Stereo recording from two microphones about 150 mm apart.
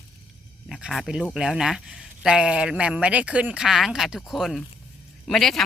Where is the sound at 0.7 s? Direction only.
5° right (ahead or behind).